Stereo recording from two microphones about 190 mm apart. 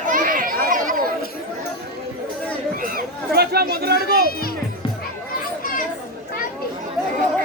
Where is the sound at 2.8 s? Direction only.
50° right (ahead or behind).